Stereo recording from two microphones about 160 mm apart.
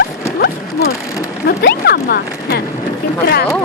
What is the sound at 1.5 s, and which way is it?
Speech, 80° left.